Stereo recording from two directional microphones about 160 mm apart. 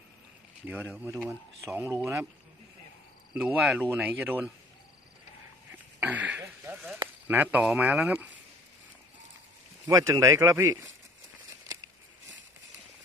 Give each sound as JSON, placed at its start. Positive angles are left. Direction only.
{"t": 0.7, "sound": "speech", "side_deg": -10}
{"t": 3.4, "sound": "speech", "side_deg": -10}
{"t": 6.0, "sound": "a sound", "side_deg": -10}
{"t": 7.3, "sound": "speech", "side_deg": -10}
{"t": 9.9, "sound": "speech", "side_deg": -20}